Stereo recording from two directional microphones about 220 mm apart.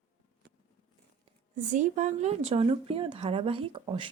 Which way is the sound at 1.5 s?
35° right (ahead or behind).